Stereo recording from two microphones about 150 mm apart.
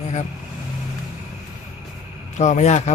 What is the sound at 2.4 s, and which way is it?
Speech, 50° left (ahead or behind).